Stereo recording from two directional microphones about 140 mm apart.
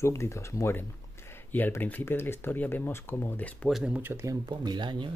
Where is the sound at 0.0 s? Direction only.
20° left (ahead or behind).